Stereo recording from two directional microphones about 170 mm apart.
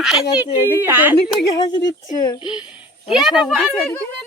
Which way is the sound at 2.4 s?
5° right (ahead or behind).